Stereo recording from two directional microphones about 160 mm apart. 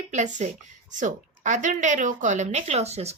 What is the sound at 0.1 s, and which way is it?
A woman's voice, 50° right (ahead or behind).